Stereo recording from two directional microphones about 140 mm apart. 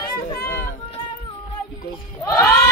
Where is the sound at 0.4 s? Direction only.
90° left.